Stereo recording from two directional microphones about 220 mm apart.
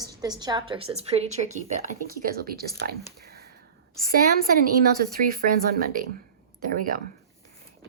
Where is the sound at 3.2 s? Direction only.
45° right (ahead or behind).